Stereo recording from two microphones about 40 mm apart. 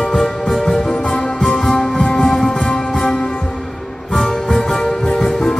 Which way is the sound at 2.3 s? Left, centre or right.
Centre.